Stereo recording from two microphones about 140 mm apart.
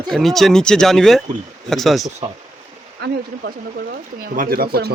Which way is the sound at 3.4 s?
85° right.